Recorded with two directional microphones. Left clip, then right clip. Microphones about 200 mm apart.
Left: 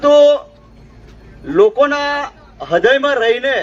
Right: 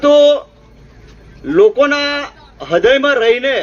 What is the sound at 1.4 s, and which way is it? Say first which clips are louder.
A man's voice: right 1 dB; 50° right (ahead or behind).